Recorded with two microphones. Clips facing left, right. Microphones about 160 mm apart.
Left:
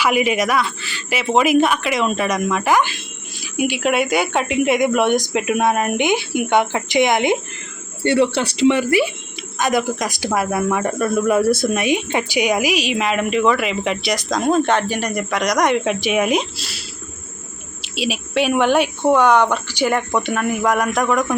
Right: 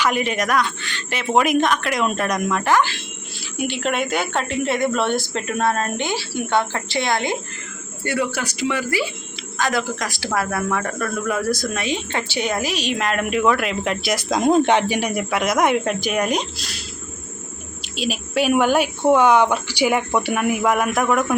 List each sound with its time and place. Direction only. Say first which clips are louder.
0.0 s a woman's voice: left 3 dB; 10° left (ahead or behind)
8.0 s speech: left 7 dB; 30° left (ahead or behind); by 16.8 s 5° left (ahead or behind)
17.8 s speech: left 2 dB; 5° left (ahead or behind)